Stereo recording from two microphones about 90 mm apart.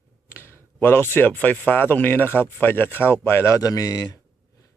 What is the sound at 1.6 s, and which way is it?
A man's voice, 25° left (ahead or behind).